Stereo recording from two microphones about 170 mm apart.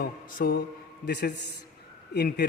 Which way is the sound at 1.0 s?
70° left (ahead or behind).